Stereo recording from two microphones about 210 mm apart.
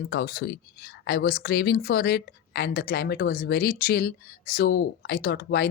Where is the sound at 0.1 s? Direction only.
45° left (ahead or behind).